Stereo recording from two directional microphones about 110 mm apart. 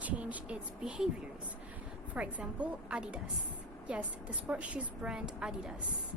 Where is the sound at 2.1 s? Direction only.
10° right (ahead or behind).